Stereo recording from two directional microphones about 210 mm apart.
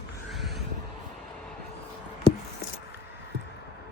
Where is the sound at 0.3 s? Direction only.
Centre (ahead or behind).